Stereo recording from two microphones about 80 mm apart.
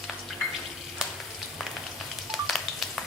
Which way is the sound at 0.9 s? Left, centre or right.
Centre.